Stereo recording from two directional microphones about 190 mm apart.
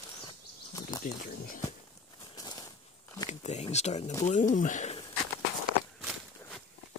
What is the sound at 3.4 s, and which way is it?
A man's voice, 35° left (ahead or behind).